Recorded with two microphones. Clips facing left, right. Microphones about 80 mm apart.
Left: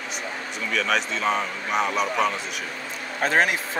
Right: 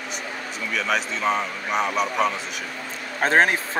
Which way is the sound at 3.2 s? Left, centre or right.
Right.